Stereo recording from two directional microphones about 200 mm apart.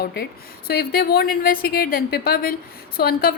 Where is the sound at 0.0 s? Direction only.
50° left (ahead or behind).